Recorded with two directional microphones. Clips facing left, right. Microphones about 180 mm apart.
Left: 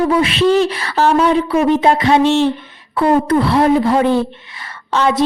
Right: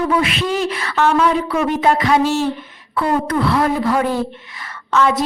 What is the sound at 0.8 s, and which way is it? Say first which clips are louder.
A woman's voice: left 2 dB; 35° left (ahead or behind).